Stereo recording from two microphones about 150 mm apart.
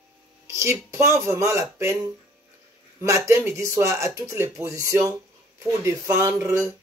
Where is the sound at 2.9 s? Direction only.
20° right (ahead or behind).